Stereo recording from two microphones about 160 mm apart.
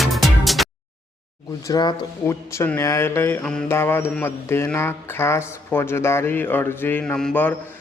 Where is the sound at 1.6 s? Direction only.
25° left (ahead or behind).